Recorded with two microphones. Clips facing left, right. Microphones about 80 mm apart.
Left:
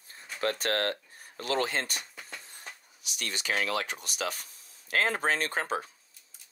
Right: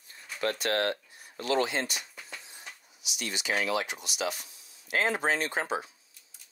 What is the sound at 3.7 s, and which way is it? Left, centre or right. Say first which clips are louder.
Speech: right 1 dB; left.